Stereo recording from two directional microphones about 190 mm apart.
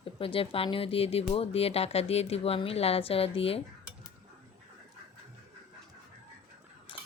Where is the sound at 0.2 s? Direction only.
30° left (ahead or behind).